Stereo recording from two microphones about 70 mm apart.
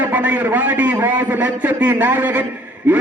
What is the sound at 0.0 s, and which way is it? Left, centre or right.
A man's voice, right.